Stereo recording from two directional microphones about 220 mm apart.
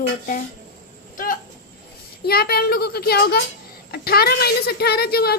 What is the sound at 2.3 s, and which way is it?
A woman's voice, 45° left (ahead or behind).